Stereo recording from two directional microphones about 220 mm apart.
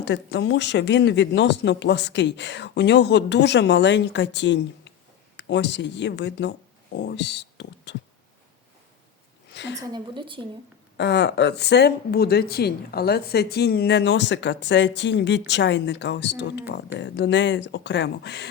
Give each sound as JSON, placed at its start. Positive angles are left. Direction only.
{"t": 0.0, "sound": "speech", "side_deg": 50}
{"t": 9.5, "sound": "a sound", "side_deg": 50}
{"t": 9.8, "sound": "a woman's voice", "side_deg": -20}
{"t": 10.9, "sound": "speech", "side_deg": 50}